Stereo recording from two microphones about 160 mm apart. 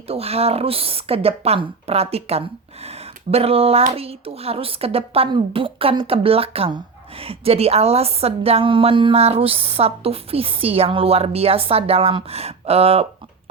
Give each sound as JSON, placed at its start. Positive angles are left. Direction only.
{"t": 0.1, "sound": "speech", "side_deg": -40}